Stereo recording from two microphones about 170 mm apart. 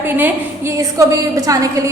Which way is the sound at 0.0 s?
15° right (ahead or behind).